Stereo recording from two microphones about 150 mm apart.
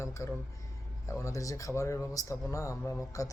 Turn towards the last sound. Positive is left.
turn(degrees=20)  # may be behind; listen again after turning